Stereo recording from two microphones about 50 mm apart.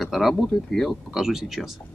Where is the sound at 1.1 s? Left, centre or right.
Centre.